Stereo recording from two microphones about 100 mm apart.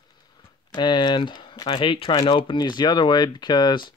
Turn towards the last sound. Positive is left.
turn(degrees=45)  # may be behind; listen again after turning